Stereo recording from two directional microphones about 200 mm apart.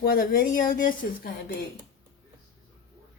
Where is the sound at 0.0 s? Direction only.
50° left (ahead or behind).